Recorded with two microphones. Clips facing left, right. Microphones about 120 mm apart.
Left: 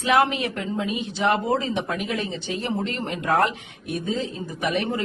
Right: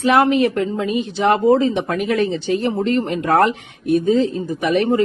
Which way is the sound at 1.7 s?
55° right (ahead or behind).